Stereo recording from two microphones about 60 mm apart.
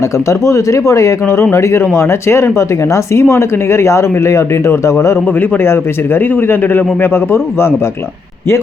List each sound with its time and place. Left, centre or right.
0.3 s speech: left
5.4 s a man's voice: left